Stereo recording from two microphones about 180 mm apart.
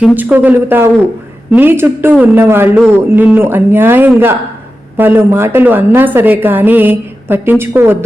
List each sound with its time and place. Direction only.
0.2 s a man's voice: 10° right (ahead or behind)